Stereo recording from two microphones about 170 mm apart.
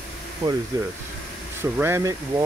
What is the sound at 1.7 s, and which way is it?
Speech, 15° right (ahead or behind).